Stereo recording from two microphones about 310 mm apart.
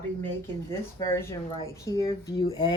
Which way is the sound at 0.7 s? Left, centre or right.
Centre.